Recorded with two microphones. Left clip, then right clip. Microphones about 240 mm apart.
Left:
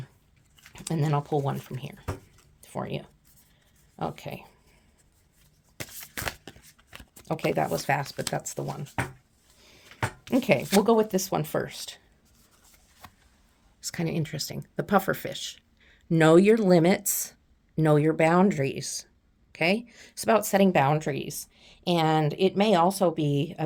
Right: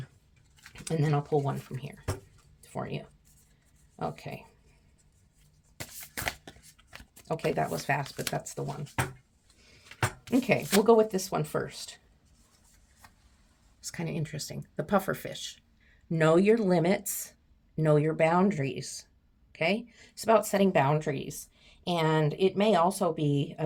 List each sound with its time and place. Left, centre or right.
0.7 s speech: left
5.8 s shuffling cards: left
7.3 s speech: left
10.2 s speech: left
13.8 s speech: left